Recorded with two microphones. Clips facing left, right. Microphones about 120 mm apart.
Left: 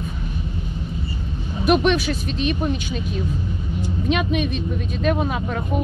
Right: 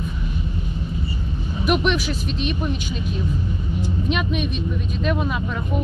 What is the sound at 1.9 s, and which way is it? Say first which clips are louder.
Speech: left 2 dB; 50° left (ahead or behind).